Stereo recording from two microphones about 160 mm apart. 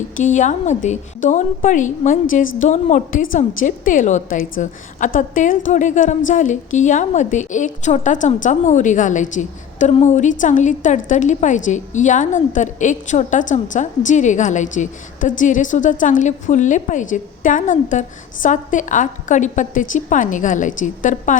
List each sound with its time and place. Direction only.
0.2 s a woman's voice: 50° left (ahead or behind)